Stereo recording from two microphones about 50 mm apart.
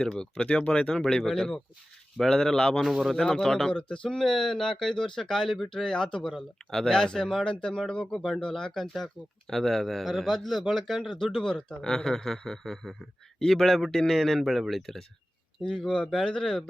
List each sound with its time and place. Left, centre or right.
0.0 s speech: centre
2.8 s a man's voice: centre
3.2 s a man's voice: centre